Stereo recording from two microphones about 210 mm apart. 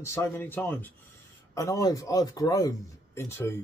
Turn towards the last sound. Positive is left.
turn(degrees=10)  # may be behind; listen again after turning